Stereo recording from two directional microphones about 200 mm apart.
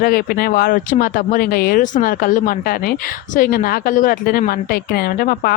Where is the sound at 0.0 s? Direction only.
50° left (ahead or behind).